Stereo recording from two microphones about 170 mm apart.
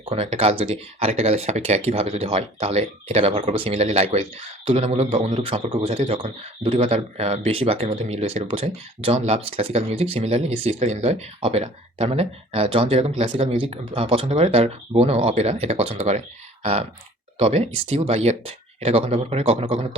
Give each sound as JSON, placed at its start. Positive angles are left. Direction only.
{"t": 0.0, "sound": "speech", "side_deg": -35}
{"t": 17.3, "sound": "speech", "side_deg": -35}